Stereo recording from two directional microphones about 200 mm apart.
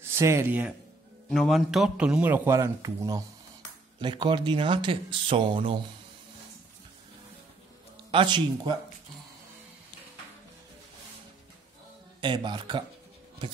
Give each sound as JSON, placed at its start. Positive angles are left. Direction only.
{"t": 0.0, "sound": "a man's voice", "side_deg": -15}
{"t": 8.1, "sound": "speech", "side_deg": -25}
{"t": 12.2, "sound": "speech", "side_deg": -25}